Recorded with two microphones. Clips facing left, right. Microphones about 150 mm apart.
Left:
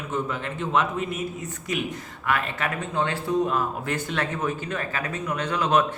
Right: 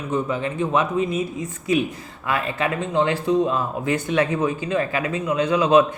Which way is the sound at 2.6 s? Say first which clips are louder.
Right 6 dB; 25° right (ahead or behind).